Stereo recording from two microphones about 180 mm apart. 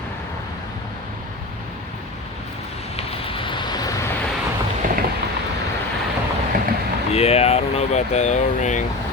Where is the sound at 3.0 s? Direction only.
30° left (ahead or behind).